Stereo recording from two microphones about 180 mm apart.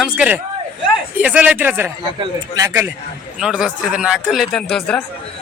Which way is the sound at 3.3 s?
5° right (ahead or behind).